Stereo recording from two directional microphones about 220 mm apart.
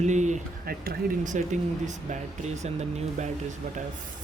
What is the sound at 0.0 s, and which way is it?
Speech, 35° right (ahead or behind).